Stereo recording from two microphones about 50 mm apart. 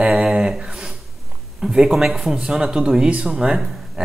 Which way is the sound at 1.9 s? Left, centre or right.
Centre.